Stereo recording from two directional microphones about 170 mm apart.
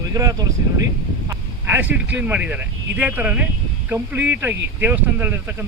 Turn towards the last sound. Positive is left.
turn(degrees=-10)  # may be behind; listen again after turning